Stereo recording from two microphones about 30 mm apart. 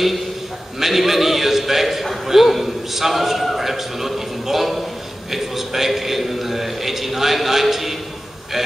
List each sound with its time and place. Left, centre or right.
0.7 s a man's voice: centre